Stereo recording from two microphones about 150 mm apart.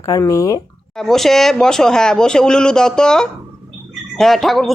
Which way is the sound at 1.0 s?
Centre (ahead or behind).